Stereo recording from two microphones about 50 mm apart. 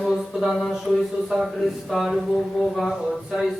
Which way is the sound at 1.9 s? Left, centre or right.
Centre.